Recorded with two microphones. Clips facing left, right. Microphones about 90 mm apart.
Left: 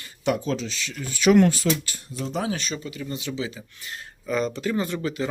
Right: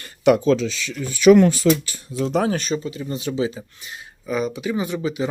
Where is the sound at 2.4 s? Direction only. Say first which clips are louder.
Right 5 dB; 45° right (ahead or behind).